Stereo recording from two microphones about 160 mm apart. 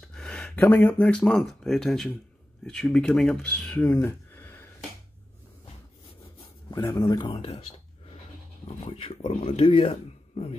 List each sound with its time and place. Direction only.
0.1 s speech: 5° left (ahead or behind)
6.7 s speech: 25° left (ahead or behind)
7.3 s speech: 40° left (ahead or behind)
8.6 s speech: 40° left (ahead or behind)